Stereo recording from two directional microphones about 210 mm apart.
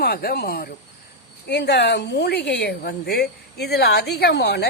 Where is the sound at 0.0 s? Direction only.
45° left (ahead or behind).